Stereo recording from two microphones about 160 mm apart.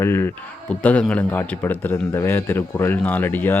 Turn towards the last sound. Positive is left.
turn(degrees=10)  # may be behind; listen again after turning